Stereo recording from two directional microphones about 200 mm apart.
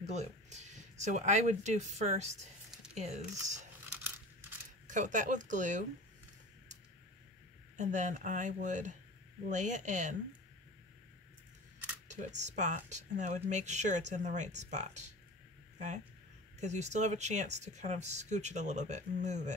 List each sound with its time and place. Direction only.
0.0 s speech: 35° right (ahead or behind)
4.8 s speech: 40° right (ahead or behind)
7.7 s speech: 35° right (ahead or behind)
12.1 s speech: 35° right (ahead or behind)
16.5 s speech: 35° right (ahead or behind)